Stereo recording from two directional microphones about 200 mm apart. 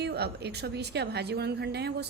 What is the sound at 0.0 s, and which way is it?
A woman's voice, 55° right (ahead or behind).